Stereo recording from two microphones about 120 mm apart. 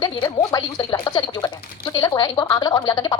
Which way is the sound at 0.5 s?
35° left (ahead or behind).